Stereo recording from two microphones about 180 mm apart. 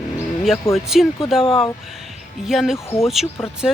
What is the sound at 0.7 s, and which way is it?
Speech, centre (ahead or behind).